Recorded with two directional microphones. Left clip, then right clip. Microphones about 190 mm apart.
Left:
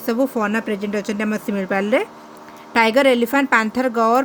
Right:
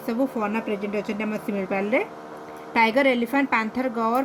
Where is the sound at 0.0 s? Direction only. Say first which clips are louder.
Left 6 dB; 45° left (ahead or behind).